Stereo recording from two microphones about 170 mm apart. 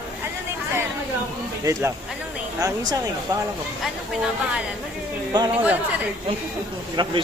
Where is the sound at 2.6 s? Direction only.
20° right (ahead or behind).